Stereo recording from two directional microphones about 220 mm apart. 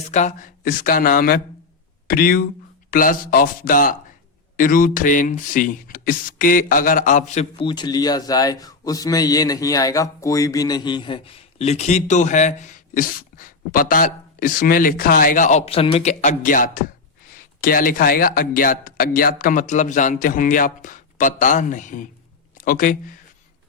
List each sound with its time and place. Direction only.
0.1 s speech: 35° left (ahead or behind)